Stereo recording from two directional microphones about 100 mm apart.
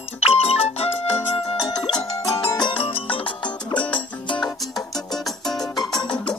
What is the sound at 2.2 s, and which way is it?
Music, 40° left (ahead or behind).